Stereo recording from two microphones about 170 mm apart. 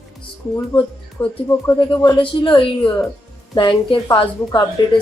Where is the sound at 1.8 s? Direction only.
30° left (ahead or behind).